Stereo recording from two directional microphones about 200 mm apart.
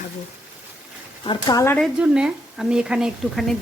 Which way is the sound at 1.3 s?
20° left (ahead or behind).